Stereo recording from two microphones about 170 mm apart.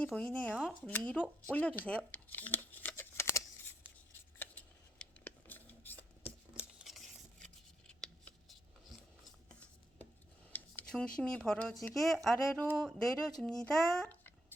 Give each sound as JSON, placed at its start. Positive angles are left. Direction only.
{"t": 0.0, "sound": "speech", "side_deg": 5}
{"t": 0.5, "sound": "speech", "side_deg": -5}
{"t": 0.9, "sound": "speech", "side_deg": 10}
{"t": 1.5, "sound": "shuffling cards", "side_deg": 10}
{"t": 4.4, "sound": "a sound", "side_deg": 10}
{"t": 6.6, "sound": "scissors", "side_deg": 0}
{"t": 10.5, "sound": "a sound", "side_deg": 5}
{"t": 11.2, "sound": "a child's voice", "side_deg": 5}